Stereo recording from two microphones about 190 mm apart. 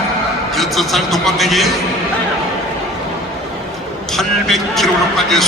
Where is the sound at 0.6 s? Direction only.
Centre (ahead or behind).